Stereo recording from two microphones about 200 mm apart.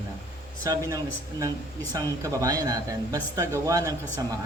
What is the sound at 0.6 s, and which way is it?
Speech, 15° right (ahead or behind).